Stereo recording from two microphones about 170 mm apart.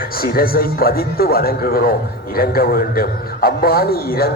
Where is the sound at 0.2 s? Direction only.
60° left (ahead or behind).